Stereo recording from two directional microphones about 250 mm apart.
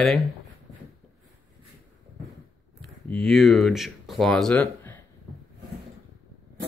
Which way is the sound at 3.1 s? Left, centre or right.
Centre.